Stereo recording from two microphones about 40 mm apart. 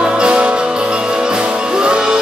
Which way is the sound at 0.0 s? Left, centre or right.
Right.